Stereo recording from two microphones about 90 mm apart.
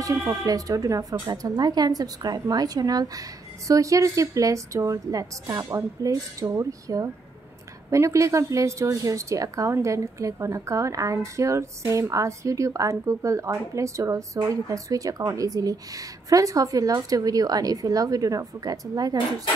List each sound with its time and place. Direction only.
0.0 s a woman's voice: 35° right (ahead or behind)